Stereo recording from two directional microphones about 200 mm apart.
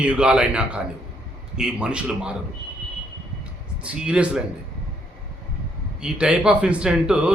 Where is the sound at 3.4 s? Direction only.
5° right (ahead or behind).